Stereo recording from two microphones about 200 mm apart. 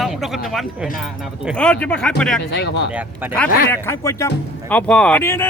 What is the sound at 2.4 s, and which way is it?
Speech, 55° left (ahead or behind).